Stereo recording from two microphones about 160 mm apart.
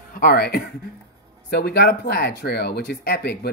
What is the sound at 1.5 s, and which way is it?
Speech, 85° left.